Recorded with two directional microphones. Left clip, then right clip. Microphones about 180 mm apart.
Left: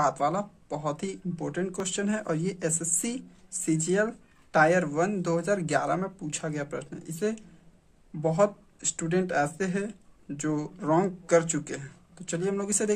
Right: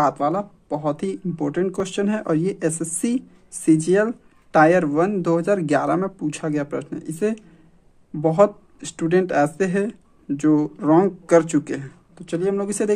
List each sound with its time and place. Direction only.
0.0 s speech: 20° right (ahead or behind)